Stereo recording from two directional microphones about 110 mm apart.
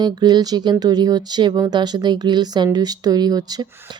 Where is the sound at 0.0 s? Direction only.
40° right (ahead or behind).